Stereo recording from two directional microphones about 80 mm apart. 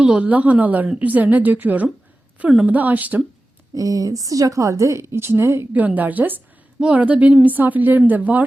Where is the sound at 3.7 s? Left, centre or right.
Right.